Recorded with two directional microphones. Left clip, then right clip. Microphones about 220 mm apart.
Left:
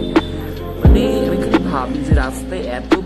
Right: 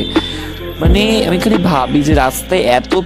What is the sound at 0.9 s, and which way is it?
Music, 40° right (ahead or behind).